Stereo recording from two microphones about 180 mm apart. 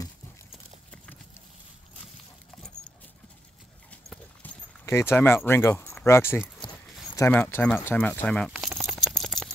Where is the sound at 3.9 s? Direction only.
10° left (ahead or behind).